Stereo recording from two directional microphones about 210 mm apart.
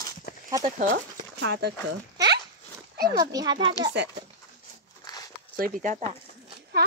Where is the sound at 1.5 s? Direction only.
50° right (ahead or behind).